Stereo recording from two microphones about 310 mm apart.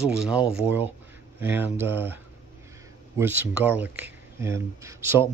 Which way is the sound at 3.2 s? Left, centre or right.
Centre.